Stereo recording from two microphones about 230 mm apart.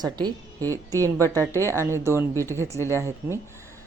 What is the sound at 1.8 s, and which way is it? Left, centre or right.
A woman's voice, centre.